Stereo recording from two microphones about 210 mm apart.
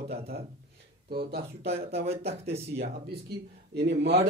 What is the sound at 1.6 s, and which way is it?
Speech, 30° right (ahead or behind).